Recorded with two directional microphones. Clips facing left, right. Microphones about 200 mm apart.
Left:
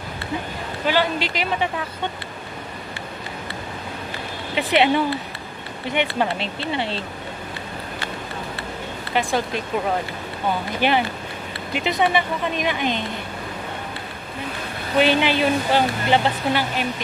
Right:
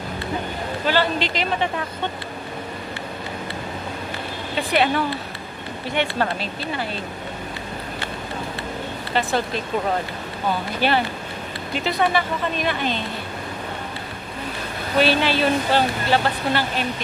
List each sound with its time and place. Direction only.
0.8 s speech: 10° left (ahead or behind)
4.6 s speech: 20° left (ahead or behind)
9.1 s speech: 15° left (ahead or behind)
10.8 s speech: 15° left (ahead or behind)
15.0 s speech: 15° left (ahead or behind)